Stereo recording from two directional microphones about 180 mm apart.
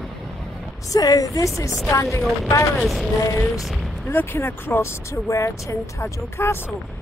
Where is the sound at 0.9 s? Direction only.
20° left (ahead or behind).